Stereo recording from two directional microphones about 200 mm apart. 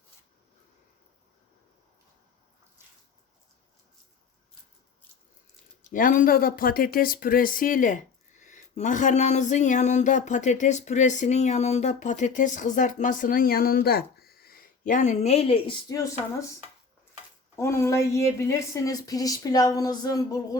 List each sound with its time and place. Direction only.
5.8 s speech: 40° left (ahead or behind); by 16.0 s 25° left (ahead or behind)
16.0 s speech: 15° left (ahead or behind)
17.6 s speech: 15° left (ahead or behind)